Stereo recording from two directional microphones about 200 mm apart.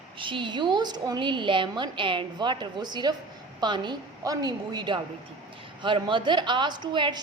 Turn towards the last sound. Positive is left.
turn(degrees=-25)  # may be behind; listen again after turning